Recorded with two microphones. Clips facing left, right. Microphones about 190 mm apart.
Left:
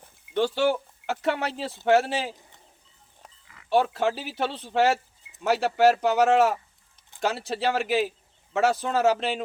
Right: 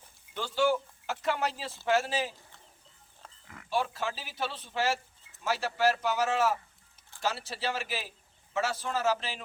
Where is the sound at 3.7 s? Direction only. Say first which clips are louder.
Left 9 dB; 65° left (ahead or behind).